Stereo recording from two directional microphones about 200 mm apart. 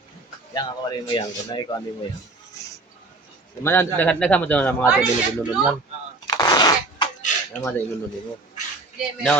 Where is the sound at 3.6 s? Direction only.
10° left (ahead or behind).